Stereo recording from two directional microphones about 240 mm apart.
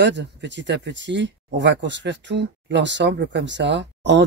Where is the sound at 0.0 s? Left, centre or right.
Right.